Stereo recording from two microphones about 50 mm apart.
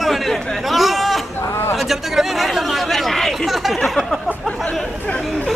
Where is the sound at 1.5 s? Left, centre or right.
Left.